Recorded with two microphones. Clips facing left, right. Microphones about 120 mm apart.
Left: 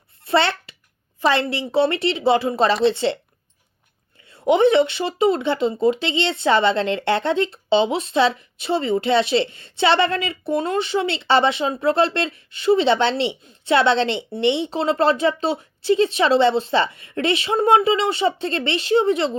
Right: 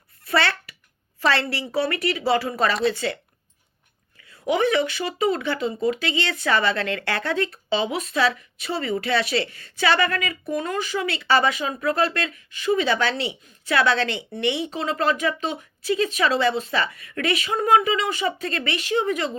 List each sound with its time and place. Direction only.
0.3 s a sound: 25° left (ahead or behind)
1.2 s speech: 20° left (ahead or behind)
4.3 s speech: 25° left (ahead or behind)